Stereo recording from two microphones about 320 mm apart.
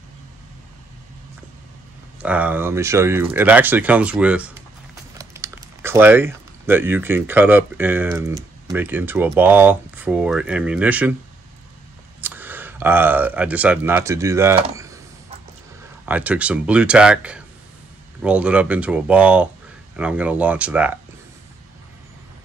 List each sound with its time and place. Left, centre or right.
2.2 s speech: centre
12.2 s speech: centre
16.1 s speech: centre